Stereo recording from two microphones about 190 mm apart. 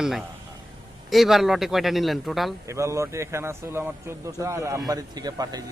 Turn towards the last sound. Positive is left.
turn(degrees=-20)  # may be behind; listen again after turning